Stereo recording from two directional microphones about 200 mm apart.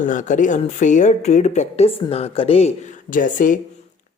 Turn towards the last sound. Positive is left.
turn(degrees=40)  # may be behind; listen again after turning